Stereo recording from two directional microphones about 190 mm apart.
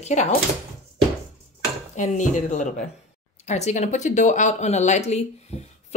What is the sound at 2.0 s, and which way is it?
Speech, 40° left (ahead or behind).